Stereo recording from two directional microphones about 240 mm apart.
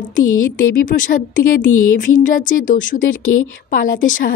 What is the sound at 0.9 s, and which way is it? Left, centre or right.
Speech, left.